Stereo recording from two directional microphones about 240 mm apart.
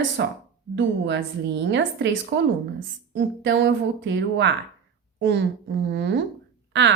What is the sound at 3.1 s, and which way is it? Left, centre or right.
A woman's voice, right.